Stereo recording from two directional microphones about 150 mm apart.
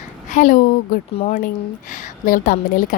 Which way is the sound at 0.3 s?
60° left (ahead or behind).